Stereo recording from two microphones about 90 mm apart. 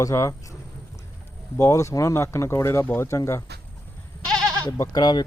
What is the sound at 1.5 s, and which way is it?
Speech, 35° left (ahead or behind).